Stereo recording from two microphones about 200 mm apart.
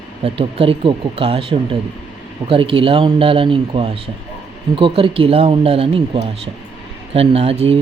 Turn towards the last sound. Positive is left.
turn(degrees=-30)  # may be behind; listen again after turning